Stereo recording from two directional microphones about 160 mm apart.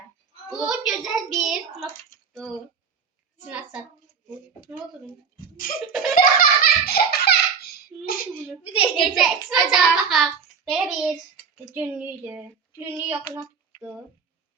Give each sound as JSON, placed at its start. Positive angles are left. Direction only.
{"t": 0.5, "sound": "child singing", "side_deg": 0}
{"t": 3.5, "sound": "speech", "side_deg": -5}
{"t": 6.1, "sound": "belly laugh", "side_deg": 65}
{"t": 8.0, "sound": "speech", "side_deg": 65}
{"t": 8.7, "sound": "a woman's voice", "side_deg": 35}
{"t": 9.1, "sound": "child singing", "side_deg": 0}
{"t": 10.7, "sound": "a child's voice", "side_deg": -5}